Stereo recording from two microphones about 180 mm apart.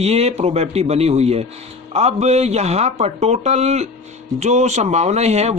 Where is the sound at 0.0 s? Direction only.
35° right (ahead or behind).